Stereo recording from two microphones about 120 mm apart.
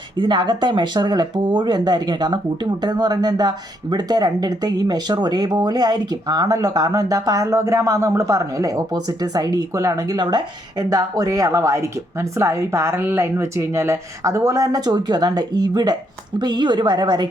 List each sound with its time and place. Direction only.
0.2 s speech: 40° right (ahead or behind)